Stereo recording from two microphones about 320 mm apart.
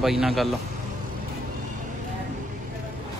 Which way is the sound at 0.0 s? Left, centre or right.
Centre.